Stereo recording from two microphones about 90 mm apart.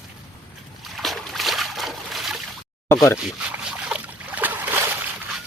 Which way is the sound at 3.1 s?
15° right (ahead or behind).